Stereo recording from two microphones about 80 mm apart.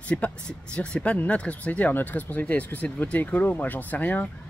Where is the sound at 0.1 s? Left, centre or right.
Centre.